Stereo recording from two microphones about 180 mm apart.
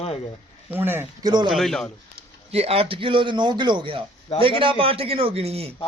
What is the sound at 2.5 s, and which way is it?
A man's voice, 35° right (ahead or behind).